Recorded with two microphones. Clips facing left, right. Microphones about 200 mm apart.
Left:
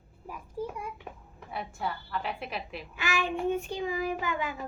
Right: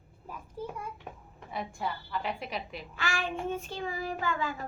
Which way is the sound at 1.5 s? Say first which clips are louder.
Even; centre (ahead or behind).